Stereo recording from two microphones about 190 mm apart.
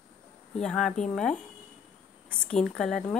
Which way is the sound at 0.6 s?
5° left (ahead or behind).